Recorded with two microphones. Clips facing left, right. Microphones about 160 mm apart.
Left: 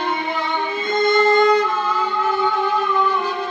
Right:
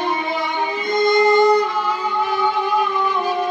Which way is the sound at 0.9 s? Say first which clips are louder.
Right 1 dB; 15° right (ahead or behind).